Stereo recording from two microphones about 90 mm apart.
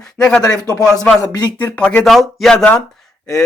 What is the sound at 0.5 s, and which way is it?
Speech, 45° left (ahead or behind).